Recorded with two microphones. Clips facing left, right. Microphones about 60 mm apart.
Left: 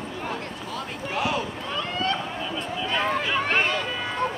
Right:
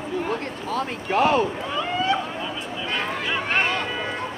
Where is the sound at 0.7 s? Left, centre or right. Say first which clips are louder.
Right 9 dB; right.